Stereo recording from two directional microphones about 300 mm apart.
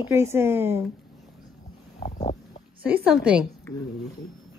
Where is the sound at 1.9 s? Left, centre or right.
Left.